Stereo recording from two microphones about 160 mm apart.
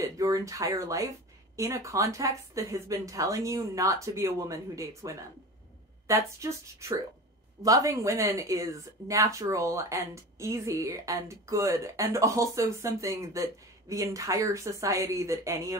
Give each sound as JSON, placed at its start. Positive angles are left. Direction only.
{"t": 0.0, "sound": "speech", "side_deg": -20}